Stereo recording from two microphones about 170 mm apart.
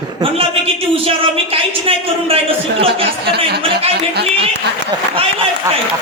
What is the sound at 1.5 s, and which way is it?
Speech, 35° right (ahead or behind).